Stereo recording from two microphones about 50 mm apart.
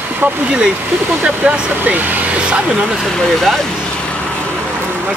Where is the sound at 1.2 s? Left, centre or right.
Right.